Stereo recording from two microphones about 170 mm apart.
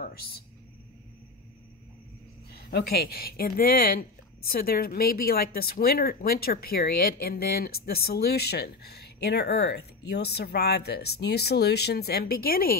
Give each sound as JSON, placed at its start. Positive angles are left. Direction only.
{"t": 2.5, "sound": "speech", "side_deg": 65}